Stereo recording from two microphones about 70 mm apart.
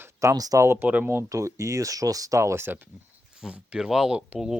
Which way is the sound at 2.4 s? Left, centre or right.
Right.